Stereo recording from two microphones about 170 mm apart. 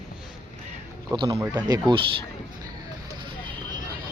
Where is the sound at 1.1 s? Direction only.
25° right (ahead or behind).